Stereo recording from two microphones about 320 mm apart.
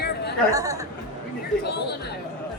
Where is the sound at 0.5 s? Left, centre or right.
Centre.